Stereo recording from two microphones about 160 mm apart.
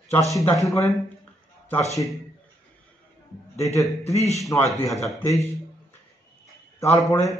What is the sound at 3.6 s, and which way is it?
Speech, 20° left (ahead or behind).